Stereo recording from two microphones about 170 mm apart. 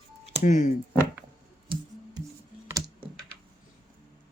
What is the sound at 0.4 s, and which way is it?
Speech, 45° left (ahead or behind).